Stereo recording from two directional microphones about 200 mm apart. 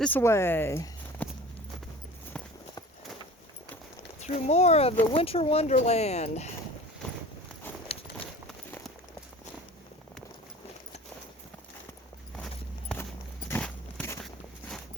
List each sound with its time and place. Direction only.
0.0 s speech: 10° left (ahead or behind)
2.3 s clip-clop: 5° left (ahead or behind)
4.2 s speech: 35° left (ahead or behind)
13.5 s a sound: 10° left (ahead or behind)